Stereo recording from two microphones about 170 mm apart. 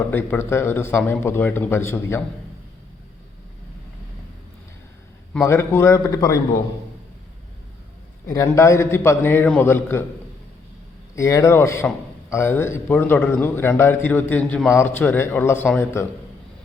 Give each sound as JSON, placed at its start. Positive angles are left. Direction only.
{"t": 0.1, "sound": "a man's voice", "side_deg": 10}
{"t": 5.3, "sound": "a man's voice", "side_deg": 15}
{"t": 8.3, "sound": "a man's voice", "side_deg": 20}
{"t": 11.1, "sound": "a man's voice", "side_deg": 20}